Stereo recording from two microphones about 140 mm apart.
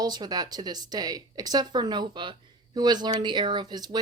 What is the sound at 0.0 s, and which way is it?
Speech, 30° right (ahead or behind).